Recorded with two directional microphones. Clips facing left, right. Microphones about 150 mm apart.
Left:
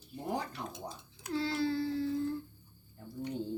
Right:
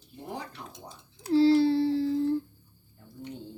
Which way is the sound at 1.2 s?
30° right (ahead or behind).